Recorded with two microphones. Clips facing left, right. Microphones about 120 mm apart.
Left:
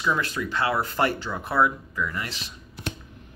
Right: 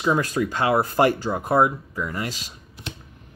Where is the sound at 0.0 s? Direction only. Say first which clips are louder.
Right 5 dB; 40° right (ahead or behind).